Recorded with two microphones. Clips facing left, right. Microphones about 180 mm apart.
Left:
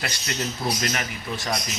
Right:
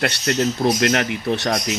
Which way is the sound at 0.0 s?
60° right (ahead or behind).